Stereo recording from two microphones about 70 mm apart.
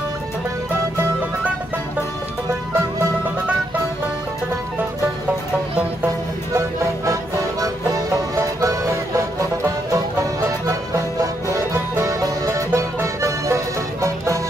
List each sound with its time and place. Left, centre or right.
8.5 s music: right